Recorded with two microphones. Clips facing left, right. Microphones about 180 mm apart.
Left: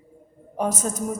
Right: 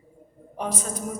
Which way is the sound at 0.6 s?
45° left (ahead or behind).